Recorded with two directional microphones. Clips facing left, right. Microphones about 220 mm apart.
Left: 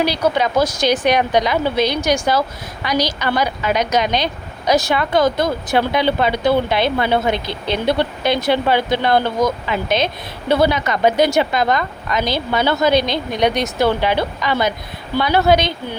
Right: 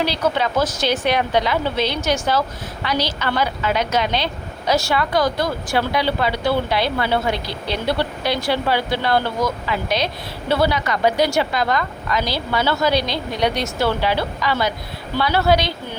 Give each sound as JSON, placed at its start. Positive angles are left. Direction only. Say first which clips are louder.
{"t": 0.0, "sound": "a woman's voice", "louder": "left 3 dB", "side_deg": 15}